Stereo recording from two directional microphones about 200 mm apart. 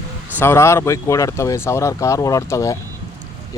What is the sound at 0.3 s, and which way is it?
Speech, 15° left (ahead or behind).